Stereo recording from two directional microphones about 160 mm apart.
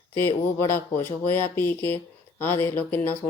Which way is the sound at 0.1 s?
15° left (ahead or behind).